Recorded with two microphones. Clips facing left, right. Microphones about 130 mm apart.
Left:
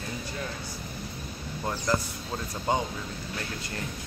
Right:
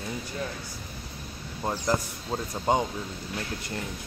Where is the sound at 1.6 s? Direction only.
25° right (ahead or behind).